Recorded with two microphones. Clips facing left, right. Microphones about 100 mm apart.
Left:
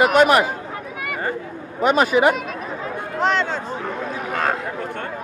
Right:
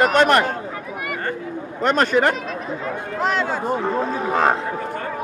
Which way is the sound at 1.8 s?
5° left (ahead or behind).